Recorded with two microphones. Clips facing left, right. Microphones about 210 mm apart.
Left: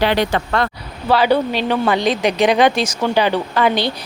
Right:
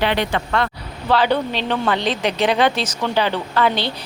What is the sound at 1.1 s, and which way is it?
Speech, 10° left (ahead or behind).